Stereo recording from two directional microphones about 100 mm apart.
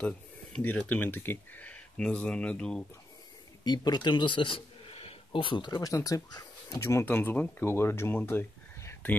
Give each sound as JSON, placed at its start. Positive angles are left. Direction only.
{"t": 0.6, "sound": "speech", "side_deg": 15}
{"t": 3.6, "sound": "speech", "side_deg": 45}
{"t": 5.8, "sound": "speech", "side_deg": 35}
{"t": 8.3, "sound": "a sound", "side_deg": 25}